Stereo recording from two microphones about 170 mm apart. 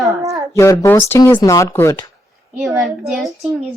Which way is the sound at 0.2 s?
20° right (ahead or behind).